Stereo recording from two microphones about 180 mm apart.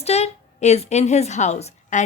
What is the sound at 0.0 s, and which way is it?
A woman's voice, 35° left (ahead or behind).